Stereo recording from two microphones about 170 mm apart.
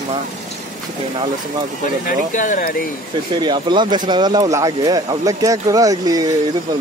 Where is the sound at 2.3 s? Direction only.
50° left (ahead or behind).